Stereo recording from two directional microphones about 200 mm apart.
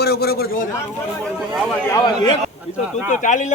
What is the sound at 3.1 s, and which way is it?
Speech, 40° left (ahead or behind).